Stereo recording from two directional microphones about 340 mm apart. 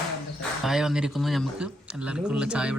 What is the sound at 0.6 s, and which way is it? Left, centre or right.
Speech, centre.